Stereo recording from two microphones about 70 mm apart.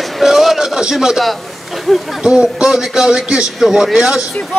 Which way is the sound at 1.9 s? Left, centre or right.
Centre.